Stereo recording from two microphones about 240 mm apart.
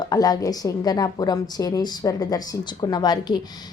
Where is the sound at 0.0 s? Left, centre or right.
Centre.